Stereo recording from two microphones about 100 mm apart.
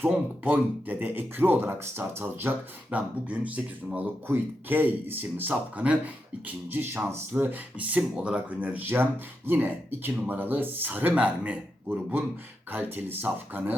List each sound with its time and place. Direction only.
0.0 s speech: 15° right (ahead or behind)